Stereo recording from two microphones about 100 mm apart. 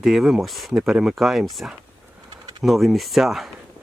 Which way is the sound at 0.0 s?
5° right (ahead or behind).